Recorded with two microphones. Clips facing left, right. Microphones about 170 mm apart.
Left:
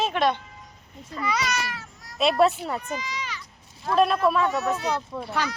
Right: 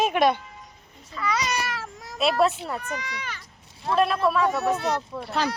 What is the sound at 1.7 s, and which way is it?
Meow, 90° right.